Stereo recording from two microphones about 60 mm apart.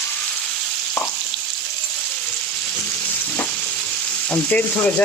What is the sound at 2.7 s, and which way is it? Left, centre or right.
Frying, left.